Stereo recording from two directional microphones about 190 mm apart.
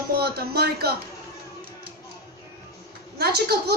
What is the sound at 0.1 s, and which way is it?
Speech, 55° right (ahead or behind).